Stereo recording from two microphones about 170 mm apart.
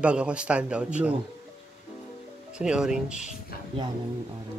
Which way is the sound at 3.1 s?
45° left (ahead or behind).